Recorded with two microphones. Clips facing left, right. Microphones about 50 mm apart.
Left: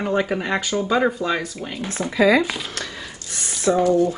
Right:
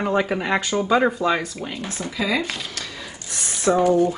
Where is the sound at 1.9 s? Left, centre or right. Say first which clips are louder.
Left 8 dB; left.